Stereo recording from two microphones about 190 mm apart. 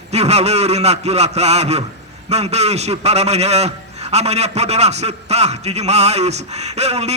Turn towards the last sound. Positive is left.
turn(degrees=-35)  # may be behind; listen again after turning